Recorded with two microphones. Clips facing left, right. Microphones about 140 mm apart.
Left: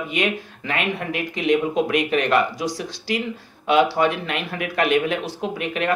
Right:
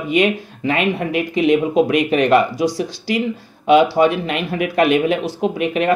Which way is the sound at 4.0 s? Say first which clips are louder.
Right 5 dB; 20° right (ahead or behind).